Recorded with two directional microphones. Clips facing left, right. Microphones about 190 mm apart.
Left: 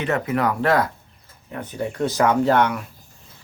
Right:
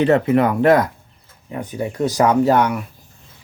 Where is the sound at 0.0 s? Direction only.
30° right (ahead or behind); by 2.7 s 10° right (ahead or behind).